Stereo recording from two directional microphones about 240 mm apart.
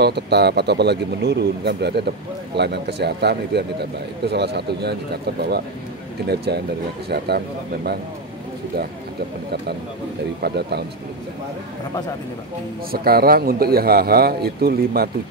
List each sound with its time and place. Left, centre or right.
0.0 s a man's voice: right
10.4 s speech: right
12.9 s a man's voice: right